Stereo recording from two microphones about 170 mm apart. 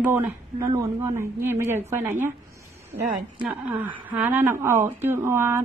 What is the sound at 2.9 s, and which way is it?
Speech, 40° right (ahead or behind).